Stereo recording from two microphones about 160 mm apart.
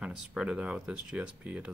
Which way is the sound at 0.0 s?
5° right (ahead or behind).